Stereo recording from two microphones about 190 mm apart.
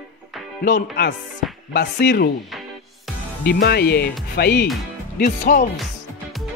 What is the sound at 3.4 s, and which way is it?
Speech, 60° left (ahead or behind).